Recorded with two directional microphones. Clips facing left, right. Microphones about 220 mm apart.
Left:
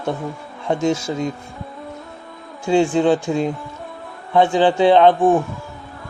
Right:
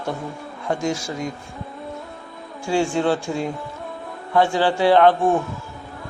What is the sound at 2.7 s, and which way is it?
Speech, 20° left (ahead or behind).